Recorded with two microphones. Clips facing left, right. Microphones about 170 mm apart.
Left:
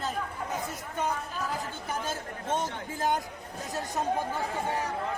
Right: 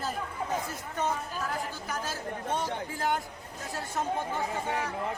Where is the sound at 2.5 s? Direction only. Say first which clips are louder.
Left 2 dB; 20° left (ahead or behind).